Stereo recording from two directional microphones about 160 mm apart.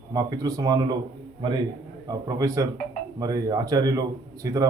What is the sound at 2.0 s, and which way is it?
Speech, 20° right (ahead or behind).